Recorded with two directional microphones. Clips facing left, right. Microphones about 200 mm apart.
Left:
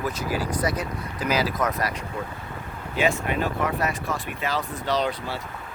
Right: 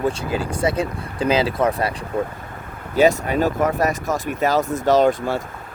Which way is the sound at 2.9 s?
40° right (ahead or behind).